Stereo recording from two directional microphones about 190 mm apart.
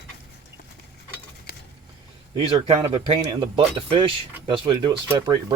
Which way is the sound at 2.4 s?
25° right (ahead or behind).